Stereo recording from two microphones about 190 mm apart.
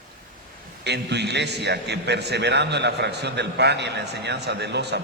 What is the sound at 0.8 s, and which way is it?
A man's voice, 60° right (ahead or behind).